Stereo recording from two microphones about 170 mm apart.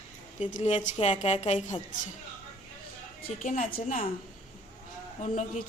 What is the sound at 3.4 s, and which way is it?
Speech, 50° left (ahead or behind).